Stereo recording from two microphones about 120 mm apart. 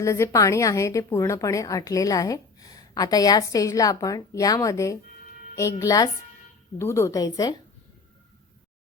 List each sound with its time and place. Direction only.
0.0 s a woman's voice: 25° left (ahead or behind)